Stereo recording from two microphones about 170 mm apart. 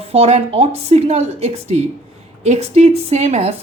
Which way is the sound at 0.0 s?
35° right (ahead or behind).